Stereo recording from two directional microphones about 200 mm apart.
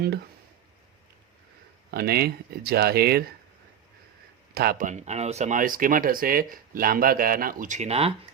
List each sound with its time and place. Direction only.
1.9 s speech: 50° right (ahead or behind)
4.5 s speech: 50° right (ahead or behind); by 8.1 s 30° right (ahead or behind)